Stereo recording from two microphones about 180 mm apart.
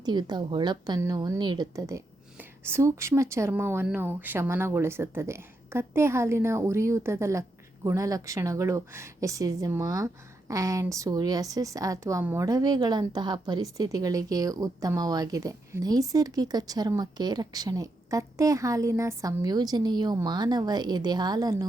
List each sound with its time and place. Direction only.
0.0 s a woman's voice: 25° right (ahead or behind)